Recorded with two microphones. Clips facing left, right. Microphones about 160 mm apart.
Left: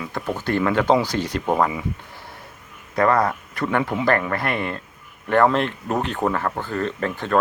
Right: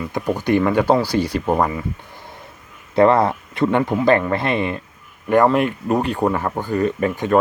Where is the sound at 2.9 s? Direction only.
25° right (ahead or behind).